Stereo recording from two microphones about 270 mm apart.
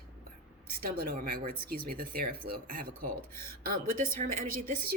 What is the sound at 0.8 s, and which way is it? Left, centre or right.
Speech, right.